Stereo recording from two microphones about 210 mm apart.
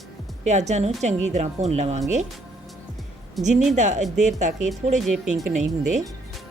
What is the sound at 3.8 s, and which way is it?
Speech, 35° right (ahead or behind).